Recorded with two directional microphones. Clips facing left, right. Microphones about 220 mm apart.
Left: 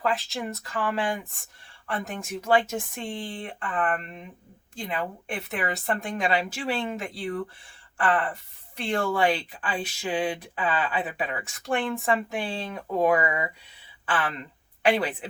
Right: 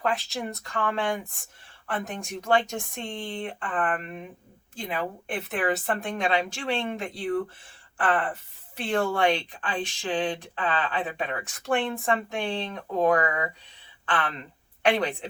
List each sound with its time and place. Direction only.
0.0 s speech: centre (ahead or behind)